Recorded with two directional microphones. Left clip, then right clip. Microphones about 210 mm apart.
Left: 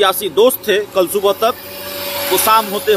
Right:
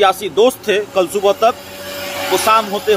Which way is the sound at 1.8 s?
25° left (ahead or behind).